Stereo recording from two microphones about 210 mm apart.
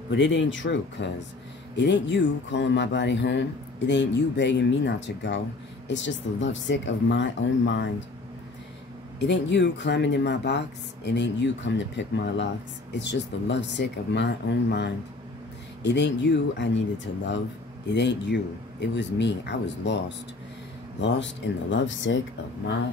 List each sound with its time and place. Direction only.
0.1 s speech: 60° left (ahead or behind)
9.2 s speech: 55° left (ahead or behind)